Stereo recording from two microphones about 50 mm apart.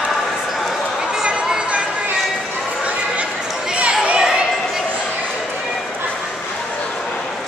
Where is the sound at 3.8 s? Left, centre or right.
Right.